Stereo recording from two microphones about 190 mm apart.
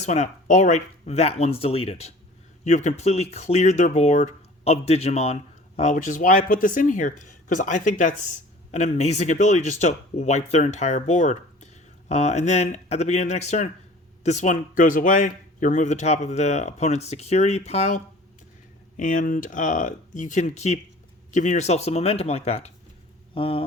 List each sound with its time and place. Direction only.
0.0 s speech: 35° left (ahead or behind)